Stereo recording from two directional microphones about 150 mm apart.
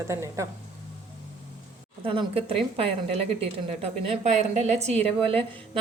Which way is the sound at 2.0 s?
40° right (ahead or behind).